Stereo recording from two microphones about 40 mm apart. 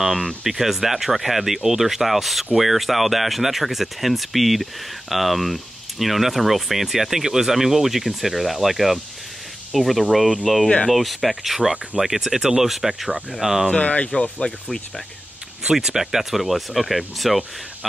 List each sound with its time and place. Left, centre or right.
0.0 s speech: centre
13.7 s speech: left
15.7 s speech: centre